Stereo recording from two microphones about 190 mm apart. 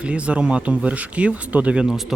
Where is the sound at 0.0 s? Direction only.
5° right (ahead or behind).